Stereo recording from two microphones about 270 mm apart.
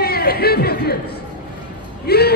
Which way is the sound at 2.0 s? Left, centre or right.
Left.